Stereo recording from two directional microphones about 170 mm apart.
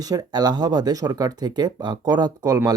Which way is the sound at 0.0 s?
20° right (ahead or behind).